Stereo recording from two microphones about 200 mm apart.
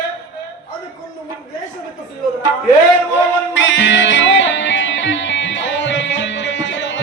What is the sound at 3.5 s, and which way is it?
Music, 70° left (ahead or behind).